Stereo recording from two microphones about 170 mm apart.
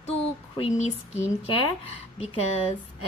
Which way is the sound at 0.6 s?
40° left (ahead or behind).